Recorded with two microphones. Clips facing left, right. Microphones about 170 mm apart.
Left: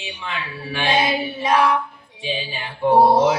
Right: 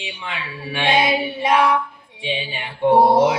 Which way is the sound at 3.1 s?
25° right (ahead or behind).